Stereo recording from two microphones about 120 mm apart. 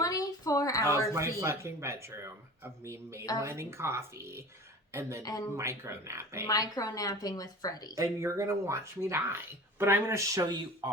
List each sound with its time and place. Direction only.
0.0 s a sound: 30° left (ahead or behind)
1.4 s speech: 25° right (ahead or behind)
5.2 s a woman's voice: 30° left (ahead or behind)
5.5 s speech: 25° right (ahead or behind)
6.5 s a woman's voice: 30° left (ahead or behind)
7.9 s speech: 25° right (ahead or behind)